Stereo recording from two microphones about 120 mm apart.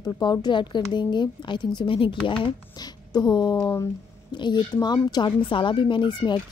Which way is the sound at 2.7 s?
35° left (ahead or behind).